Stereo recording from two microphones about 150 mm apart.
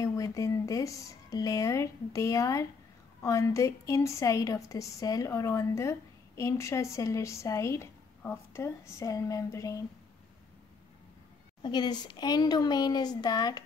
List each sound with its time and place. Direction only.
0.0 s a woman's voice: 20° left (ahead or behind)
11.6 s a woman's voice: 30° left (ahead or behind)